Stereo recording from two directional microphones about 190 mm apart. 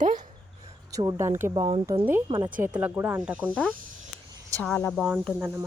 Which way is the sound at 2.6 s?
10° right (ahead or behind).